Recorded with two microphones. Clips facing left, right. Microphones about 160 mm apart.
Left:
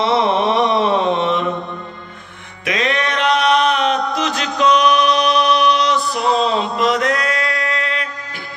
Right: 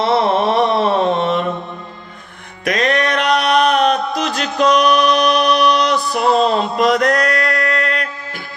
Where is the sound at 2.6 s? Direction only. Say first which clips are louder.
Right 3 dB; 45° right (ahead or behind).